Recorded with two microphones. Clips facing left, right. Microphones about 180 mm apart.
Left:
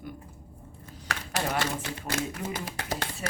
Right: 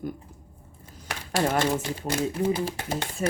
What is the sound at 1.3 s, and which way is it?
Speech, 45° right (ahead or behind).